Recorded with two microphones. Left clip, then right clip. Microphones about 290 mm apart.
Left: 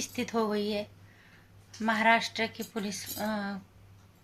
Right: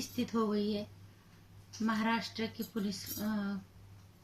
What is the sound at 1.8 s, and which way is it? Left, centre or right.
Speech, centre.